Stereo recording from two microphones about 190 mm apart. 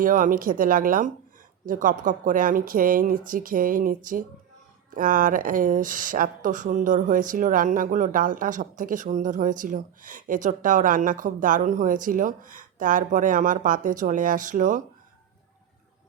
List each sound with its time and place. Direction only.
0.0 s speech: 45° right (ahead or behind)